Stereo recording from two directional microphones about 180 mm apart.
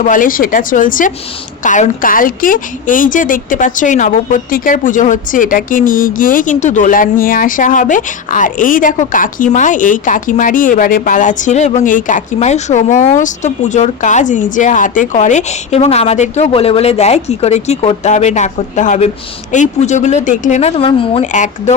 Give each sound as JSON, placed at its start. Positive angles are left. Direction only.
{"t": 0.0, "sound": "a woman's voice", "side_deg": 50}